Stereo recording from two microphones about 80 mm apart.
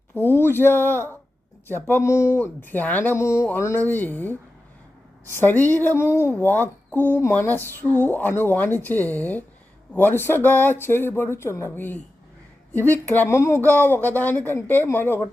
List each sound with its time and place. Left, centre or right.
0.1 s speech: left
2.0 s speech: left
3.2 s speech: left
3.8 s speech: left